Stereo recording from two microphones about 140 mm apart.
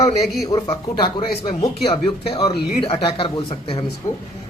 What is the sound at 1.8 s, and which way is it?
A man's voice, 40° left (ahead or behind).